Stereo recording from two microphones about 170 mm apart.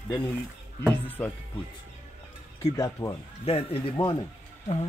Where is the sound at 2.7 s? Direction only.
20° left (ahead or behind).